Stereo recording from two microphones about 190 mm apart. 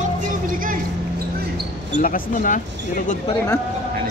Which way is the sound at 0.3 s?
45° right (ahead or behind).